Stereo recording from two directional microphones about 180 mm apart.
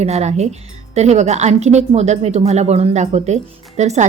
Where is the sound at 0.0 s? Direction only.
35° right (ahead or behind).